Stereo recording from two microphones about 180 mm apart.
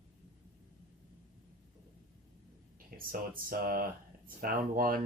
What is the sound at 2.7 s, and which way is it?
Speech, 50° right (ahead or behind).